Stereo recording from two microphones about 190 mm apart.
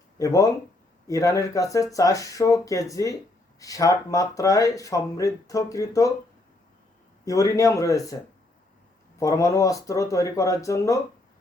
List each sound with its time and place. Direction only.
0.2 s speech: 15° left (ahead or behind)
7.3 s speech: 15° left (ahead or behind)
9.1 s speech: 15° left (ahead or behind)